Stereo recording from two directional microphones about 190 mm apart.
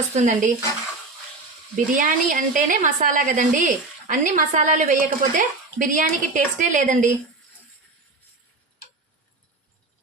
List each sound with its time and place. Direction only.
0.2 s stir: 40° right (ahead or behind)
1.7 s a woman's voice: 45° right (ahead or behind)